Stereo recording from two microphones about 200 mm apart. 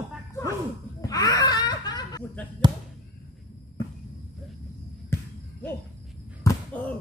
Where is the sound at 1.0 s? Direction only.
20° left (ahead or behind).